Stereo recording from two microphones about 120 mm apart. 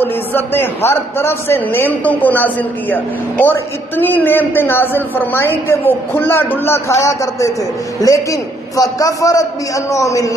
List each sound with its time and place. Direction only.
0.0 s a man's voice: 15° left (ahead or behind)